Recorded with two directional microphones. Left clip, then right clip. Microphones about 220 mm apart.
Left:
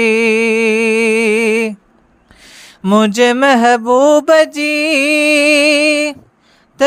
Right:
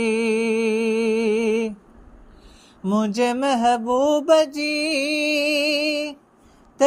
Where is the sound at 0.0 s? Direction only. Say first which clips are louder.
Left 10 dB; 35° left (ahead or behind).